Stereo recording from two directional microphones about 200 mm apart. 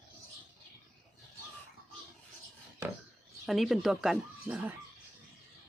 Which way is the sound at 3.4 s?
Centre (ahead or behind).